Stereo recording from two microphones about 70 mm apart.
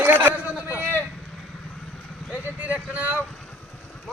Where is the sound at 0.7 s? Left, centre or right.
Right.